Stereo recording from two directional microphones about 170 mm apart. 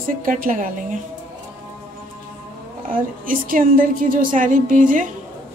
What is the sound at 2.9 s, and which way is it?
A woman's voice, 55° right (ahead or behind).